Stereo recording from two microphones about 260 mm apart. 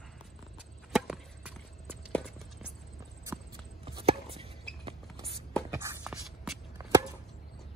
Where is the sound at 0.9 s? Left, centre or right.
Centre.